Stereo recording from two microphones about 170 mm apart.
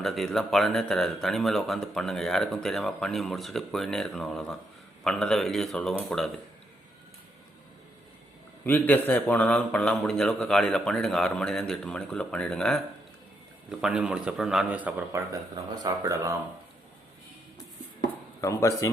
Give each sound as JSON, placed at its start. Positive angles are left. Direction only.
{"t": 0.0, "sound": "a man's voice", "side_deg": 0}
{"t": 8.6, "sound": "a man's voice", "side_deg": 10}
{"t": 15.3, "sound": "speech", "side_deg": -20}
{"t": 18.3, "sound": "speech", "side_deg": 20}